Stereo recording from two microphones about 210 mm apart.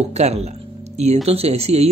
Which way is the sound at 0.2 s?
30° right (ahead or behind).